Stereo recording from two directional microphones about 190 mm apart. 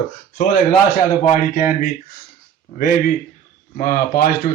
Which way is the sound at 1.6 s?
45° left (ahead or behind).